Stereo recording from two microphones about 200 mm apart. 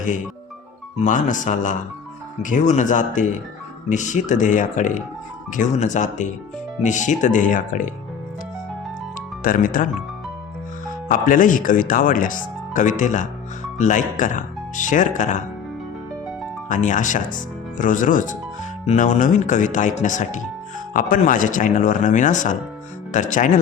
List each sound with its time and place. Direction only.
1.0 s speech: 40° left (ahead or behind)
9.4 s speech: 45° left (ahead or behind)
11.1 s speech: 40° left (ahead or behind)
16.6 s speech: 40° left (ahead or behind)